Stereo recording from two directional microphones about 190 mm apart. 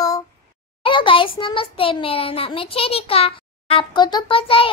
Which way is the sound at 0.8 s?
25° left (ahead or behind).